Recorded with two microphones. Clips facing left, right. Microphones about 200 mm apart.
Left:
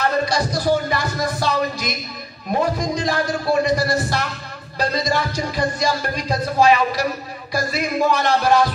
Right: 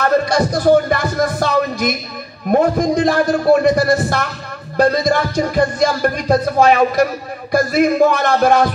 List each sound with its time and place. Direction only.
0.0 s music: 55° right (ahead or behind)